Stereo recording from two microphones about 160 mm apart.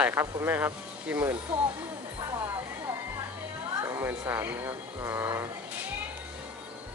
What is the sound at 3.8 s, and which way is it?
Speech, 15° right (ahead or behind).